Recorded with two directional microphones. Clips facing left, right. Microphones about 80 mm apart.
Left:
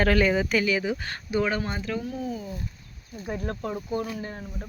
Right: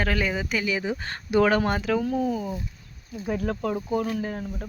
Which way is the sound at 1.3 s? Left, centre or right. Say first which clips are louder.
Right 6 dB; right.